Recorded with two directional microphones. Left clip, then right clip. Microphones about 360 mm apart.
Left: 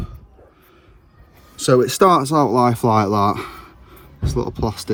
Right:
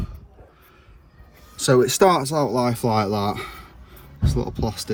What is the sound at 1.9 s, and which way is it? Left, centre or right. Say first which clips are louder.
Speech: left 3 dB; centre.